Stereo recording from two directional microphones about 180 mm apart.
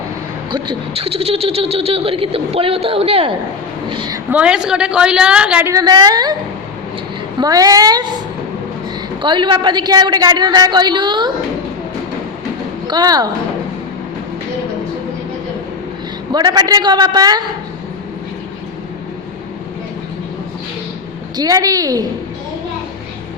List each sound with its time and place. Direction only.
0.5 s a woman's voice: 30° right (ahead or behind)
4.3 s a woman's voice: 5° right (ahead or behind)
5.7 s a woman's voice: 25° right (ahead or behind)
7.3 s a woman's voice: 20° right (ahead or behind)
9.2 s a woman's voice: 25° right (ahead or behind)
12.9 s a woman's voice: 20° right (ahead or behind)
16.3 s a woman's voice: 20° right (ahead or behind)
21.3 s a woman's voice: 20° right (ahead or behind)